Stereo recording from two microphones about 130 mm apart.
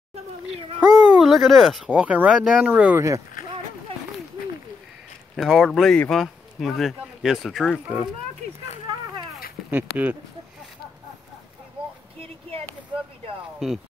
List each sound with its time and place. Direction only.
0.7 s speech: 5° right (ahead or behind)
1.9 s speech: 10° right (ahead or behind)
5.3 s a child's voice: centre (ahead or behind)
9.7 s speech: 15° right (ahead or behind)
12.2 s a sound: 50° right (ahead or behind)